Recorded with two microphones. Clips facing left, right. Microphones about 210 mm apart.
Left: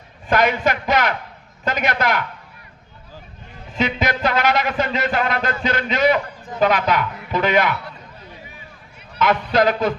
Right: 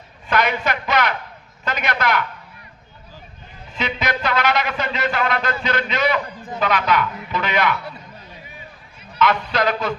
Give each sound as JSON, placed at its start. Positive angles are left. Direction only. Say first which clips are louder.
{"t": 0.3, "sound": "speech", "louder": "left 3 dB", "side_deg": 45}
{"t": 3.8, "sound": "speech", "louder": "left 3 dB", "side_deg": 45}
{"t": 9.1, "sound": "speech", "louder": "left 2 dB", "side_deg": 45}